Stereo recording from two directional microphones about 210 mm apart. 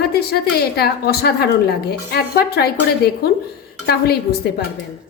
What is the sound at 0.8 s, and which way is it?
Speech, 50° left (ahead or behind).